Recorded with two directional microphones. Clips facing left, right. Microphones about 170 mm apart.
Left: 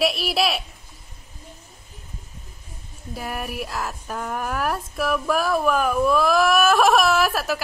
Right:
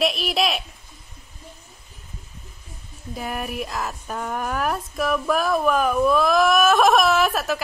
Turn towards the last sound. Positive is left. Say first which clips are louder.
# right 1 dB
turn(degrees=5)  # may be behind; listen again after turning